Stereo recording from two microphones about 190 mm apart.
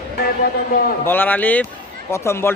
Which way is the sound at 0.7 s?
50° left (ahead or behind).